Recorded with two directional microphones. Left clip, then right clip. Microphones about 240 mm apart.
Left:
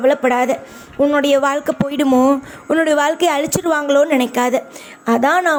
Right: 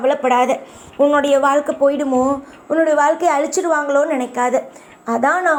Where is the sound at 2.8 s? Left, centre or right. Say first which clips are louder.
Right 1 dB; left.